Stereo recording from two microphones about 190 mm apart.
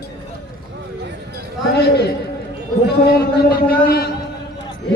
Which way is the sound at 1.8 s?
60° left (ahead or behind).